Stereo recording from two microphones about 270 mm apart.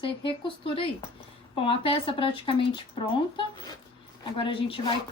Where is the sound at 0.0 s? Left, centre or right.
Centre.